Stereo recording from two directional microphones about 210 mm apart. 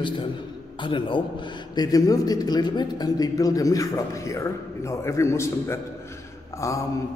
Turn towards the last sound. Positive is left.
turn(degrees=15)  # may be behind; listen again after turning